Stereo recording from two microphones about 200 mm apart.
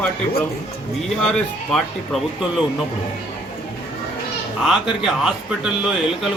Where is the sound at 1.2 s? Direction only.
5° left (ahead or behind).